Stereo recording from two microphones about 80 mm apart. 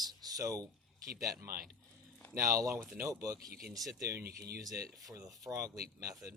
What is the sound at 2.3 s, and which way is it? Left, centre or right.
Speech, right.